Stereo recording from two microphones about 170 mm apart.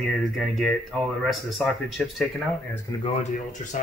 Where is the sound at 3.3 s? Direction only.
50° left (ahead or behind).